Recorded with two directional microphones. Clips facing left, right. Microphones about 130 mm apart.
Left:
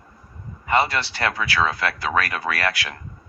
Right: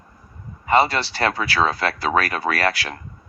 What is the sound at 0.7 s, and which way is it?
Speech, 30° right (ahead or behind).